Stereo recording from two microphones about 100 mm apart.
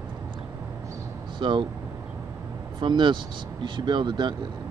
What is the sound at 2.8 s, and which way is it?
Speech, 50° right (ahead or behind).